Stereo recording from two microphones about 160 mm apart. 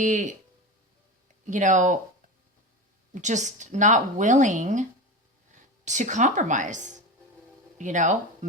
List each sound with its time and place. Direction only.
0.0 s speech: 50° right (ahead or behind)
1.5 s speech: 50° right (ahead or behind)
3.2 s speech: 50° right (ahead or behind)